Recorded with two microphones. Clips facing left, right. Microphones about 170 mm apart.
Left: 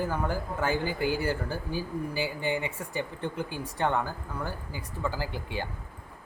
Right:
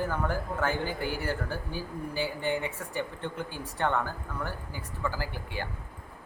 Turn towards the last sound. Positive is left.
turn(degrees=15)  # may be behind; listen again after turning